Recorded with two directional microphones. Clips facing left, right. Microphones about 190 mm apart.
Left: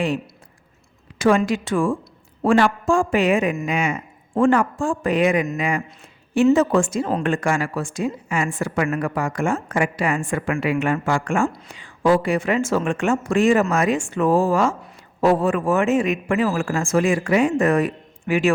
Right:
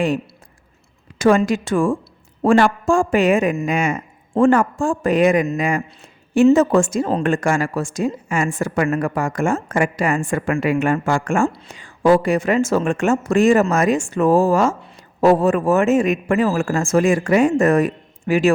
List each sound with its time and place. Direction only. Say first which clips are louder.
1.2 s a woman's voice: right 3 dB; 45° right (ahead or behind)
11.4 s a woman's voice: right 3 dB; 30° right (ahead or behind)
11.7 s a woman's voice: right 4 dB; 45° right (ahead or behind)